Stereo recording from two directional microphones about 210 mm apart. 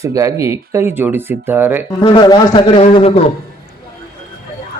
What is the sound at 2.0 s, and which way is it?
A man's voice, 20° left (ahead or behind).